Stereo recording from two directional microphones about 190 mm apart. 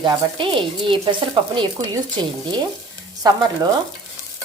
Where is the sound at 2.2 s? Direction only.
25° right (ahead or behind).